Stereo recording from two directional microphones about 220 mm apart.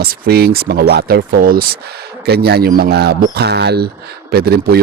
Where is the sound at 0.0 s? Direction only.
45° right (ahead or behind).